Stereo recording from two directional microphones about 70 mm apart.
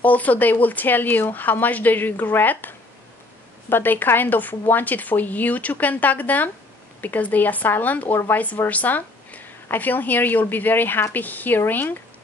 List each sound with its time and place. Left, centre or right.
0.0 s a woman's voice: left